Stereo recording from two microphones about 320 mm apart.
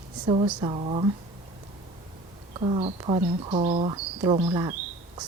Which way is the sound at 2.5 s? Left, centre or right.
Centre.